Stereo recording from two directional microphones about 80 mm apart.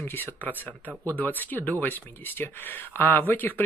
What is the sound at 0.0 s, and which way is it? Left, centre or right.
Speech, left.